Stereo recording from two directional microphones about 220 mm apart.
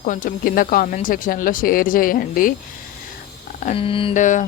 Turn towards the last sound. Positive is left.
turn(degrees=35)  # may be behind; listen again after turning